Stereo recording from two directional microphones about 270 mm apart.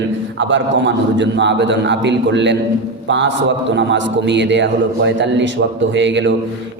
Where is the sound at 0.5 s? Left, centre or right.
Right.